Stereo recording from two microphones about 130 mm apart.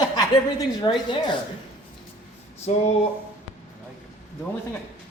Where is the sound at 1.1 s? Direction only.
40° left (ahead or behind).